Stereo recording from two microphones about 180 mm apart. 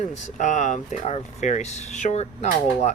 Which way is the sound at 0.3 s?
40° left (ahead or behind).